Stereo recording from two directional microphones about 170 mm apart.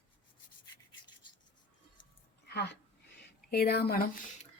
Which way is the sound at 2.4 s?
85° left.